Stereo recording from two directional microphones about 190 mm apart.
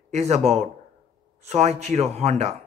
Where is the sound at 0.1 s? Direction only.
35° right (ahead or behind).